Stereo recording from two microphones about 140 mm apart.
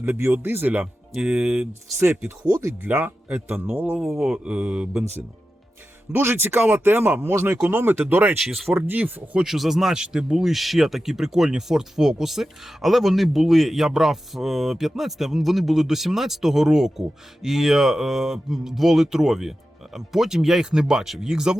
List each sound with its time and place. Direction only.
0.0 s speech: 15° right (ahead or behind)
2.0 s speech: 20° right (ahead or behind)
4.0 s speech: centre (ahead or behind)
6.1 s speech: 15° right (ahead or behind)